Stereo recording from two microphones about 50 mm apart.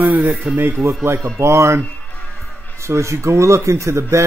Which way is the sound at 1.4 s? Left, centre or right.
Right.